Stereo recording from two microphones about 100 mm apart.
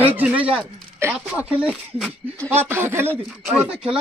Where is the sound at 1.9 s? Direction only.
10° left (ahead or behind).